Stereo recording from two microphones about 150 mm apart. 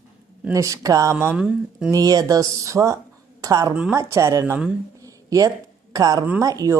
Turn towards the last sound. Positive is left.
turn(degrees=-20)  # may be behind; listen again after turning